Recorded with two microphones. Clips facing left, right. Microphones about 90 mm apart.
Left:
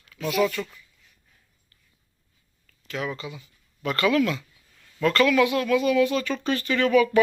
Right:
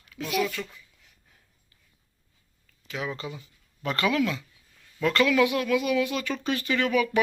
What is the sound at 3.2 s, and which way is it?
Speech, 35° right (ahead or behind).